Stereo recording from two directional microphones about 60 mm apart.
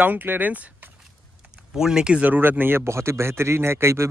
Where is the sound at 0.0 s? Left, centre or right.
Right.